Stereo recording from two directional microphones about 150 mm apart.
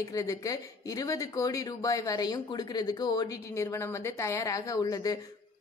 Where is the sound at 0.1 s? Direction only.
20° left (ahead or behind).